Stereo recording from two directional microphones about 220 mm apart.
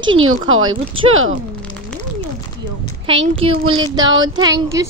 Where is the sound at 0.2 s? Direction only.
70° right (ahead or behind).